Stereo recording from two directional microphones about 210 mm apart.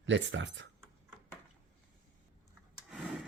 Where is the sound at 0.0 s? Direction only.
60° right (ahead or behind).